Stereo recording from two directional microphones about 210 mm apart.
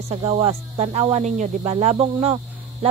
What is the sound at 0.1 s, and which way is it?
Speech, 25° right (ahead or behind).